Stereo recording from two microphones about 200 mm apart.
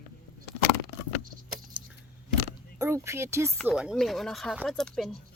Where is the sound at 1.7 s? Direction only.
5° right (ahead or behind).